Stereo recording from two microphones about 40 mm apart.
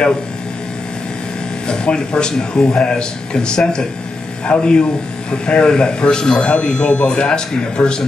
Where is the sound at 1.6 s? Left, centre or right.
Left.